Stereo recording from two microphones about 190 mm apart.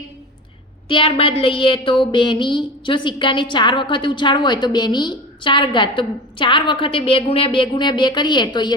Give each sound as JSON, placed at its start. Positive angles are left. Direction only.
{"t": 0.9, "sound": "a woman's voice", "side_deg": 30}